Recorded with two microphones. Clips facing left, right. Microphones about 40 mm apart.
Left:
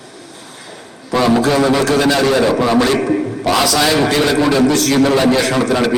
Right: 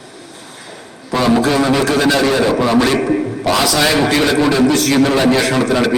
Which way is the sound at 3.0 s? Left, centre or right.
Centre.